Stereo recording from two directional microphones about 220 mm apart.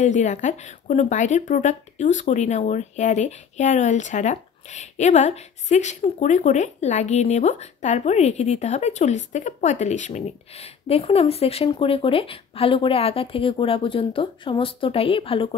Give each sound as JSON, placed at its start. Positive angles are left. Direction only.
{"t": 0.0, "sound": "speech", "side_deg": 35}